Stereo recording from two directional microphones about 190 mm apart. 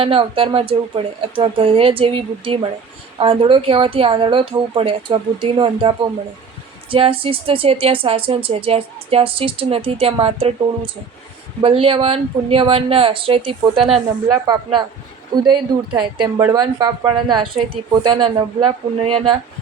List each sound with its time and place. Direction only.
0.0 s speech: 30° right (ahead or behind)
11.6 s speech: 30° right (ahead or behind)